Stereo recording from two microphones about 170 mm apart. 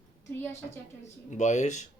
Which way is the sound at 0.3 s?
15° left (ahead or behind).